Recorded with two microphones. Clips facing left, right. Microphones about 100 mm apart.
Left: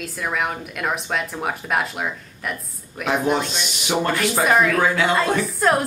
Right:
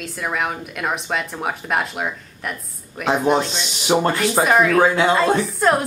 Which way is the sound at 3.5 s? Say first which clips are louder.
Right 4 dB; 25° right (ahead or behind).